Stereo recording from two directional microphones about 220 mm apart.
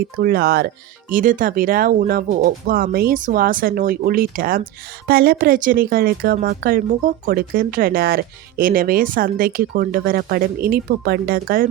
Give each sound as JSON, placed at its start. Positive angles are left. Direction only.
{"t": 0.2, "sound": "speech", "side_deg": -45}